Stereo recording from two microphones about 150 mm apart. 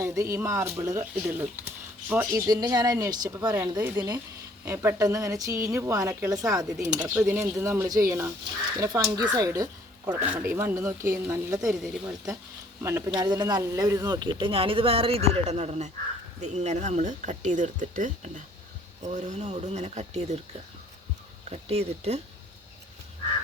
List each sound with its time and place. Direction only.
0.0 s speech: 20° right (ahead or behind)
2.5 s a woman's voice: 25° right (ahead or behind)
7.0 s a woman's voice: 10° right (ahead or behind)
10.1 s a woman's voice: 10° right (ahead or behind); by 20.4 s 45° right (ahead or behind)
21.5 s speech: 45° right (ahead or behind)